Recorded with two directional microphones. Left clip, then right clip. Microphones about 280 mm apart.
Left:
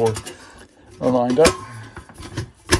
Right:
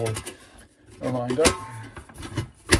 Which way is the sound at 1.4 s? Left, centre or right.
Centre.